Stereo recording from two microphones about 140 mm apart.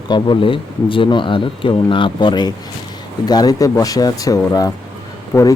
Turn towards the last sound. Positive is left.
turn(degrees=20)  # may be behind; listen again after turning